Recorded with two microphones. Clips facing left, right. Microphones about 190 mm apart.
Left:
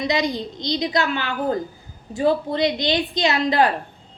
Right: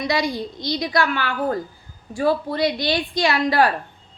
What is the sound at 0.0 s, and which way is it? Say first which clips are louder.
A woman's voice: even; 20° left (ahead or behind).